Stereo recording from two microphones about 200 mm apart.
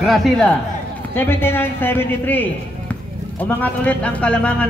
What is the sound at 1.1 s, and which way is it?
Speech, 10° left (ahead or behind).